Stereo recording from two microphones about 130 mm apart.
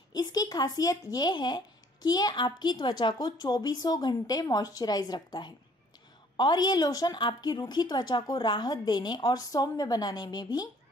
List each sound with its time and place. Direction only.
0.1 s a woman's voice: 30° left (ahead or behind)